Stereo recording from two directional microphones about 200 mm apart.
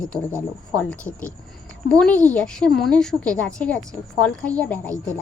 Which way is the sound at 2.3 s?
5° left (ahead or behind).